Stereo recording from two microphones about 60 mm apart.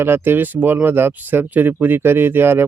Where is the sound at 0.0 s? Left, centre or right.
Right.